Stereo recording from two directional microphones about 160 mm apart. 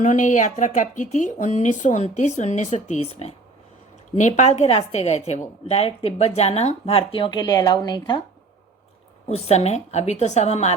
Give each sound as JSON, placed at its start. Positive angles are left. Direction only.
{"t": 0.0, "sound": "speech", "side_deg": 50}
{"t": 9.3, "sound": "speech", "side_deg": 40}